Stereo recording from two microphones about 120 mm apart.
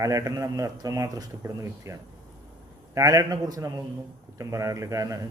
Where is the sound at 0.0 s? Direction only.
25° right (ahead or behind).